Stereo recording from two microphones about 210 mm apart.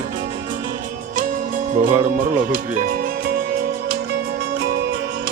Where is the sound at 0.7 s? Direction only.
40° right (ahead or behind).